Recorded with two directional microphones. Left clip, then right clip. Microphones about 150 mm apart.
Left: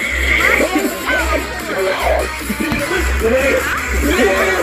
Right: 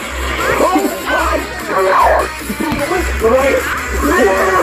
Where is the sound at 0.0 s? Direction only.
Centre (ahead or behind).